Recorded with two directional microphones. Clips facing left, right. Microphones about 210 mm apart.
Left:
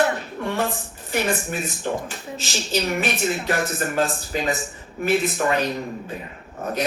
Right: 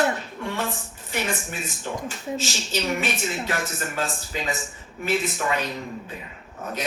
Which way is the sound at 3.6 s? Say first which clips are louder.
Left 6 dB; 60° left (ahead or behind).